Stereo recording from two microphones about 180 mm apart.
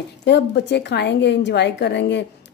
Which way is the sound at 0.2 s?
70° left (ahead or behind).